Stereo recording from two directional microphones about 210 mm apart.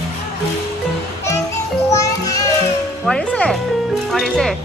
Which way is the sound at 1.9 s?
15° left (ahead or behind).